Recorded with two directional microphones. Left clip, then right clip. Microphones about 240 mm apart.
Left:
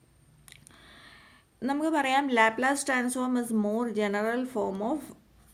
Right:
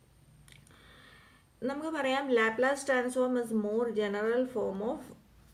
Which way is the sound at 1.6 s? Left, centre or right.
Left.